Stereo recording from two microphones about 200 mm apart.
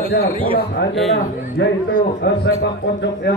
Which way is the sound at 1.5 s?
55° left (ahead or behind).